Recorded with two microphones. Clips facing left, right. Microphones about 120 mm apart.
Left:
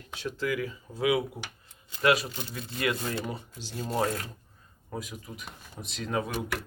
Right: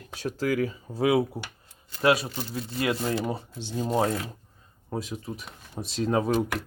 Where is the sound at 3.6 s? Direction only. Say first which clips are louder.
Right 6 dB; 25° right (ahead or behind).